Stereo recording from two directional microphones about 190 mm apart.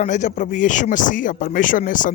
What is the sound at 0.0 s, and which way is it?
Speech, 40° left (ahead or behind).